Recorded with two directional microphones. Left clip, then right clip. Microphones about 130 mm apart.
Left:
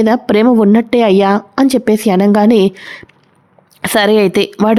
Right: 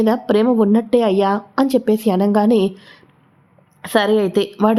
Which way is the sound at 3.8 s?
50° left (ahead or behind).